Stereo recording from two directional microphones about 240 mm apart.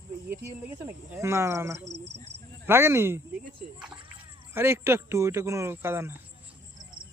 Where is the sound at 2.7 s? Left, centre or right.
Centre.